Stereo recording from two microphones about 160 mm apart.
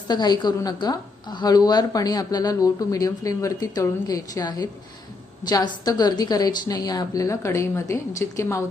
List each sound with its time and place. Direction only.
0.1 s speech: 25° left (ahead or behind)